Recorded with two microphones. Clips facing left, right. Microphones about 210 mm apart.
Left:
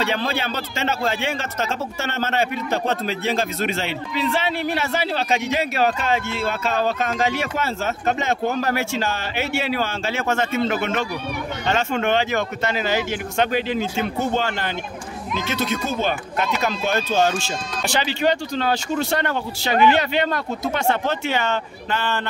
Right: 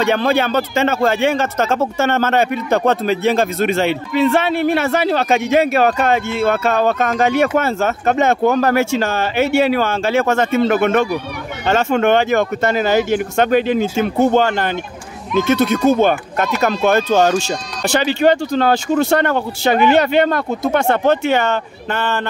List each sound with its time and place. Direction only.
0.0 s speech: 55° right (ahead or behind)